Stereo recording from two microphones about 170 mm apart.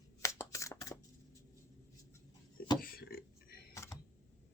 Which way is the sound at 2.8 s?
60° left (ahead or behind).